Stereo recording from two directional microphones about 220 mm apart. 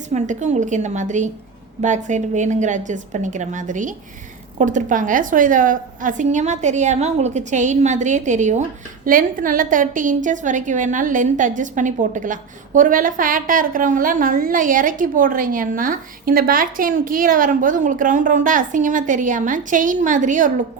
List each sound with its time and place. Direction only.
0.1 s a woman's voice: 30° right (ahead or behind)